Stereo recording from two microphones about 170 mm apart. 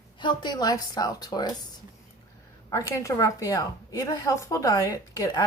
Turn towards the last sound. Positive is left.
turn(degrees=15)  # may be behind; listen again after turning